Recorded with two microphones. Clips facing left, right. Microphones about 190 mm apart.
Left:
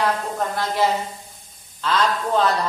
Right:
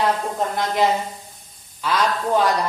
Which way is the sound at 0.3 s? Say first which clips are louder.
Right 1 dB; 20° right (ahead or behind).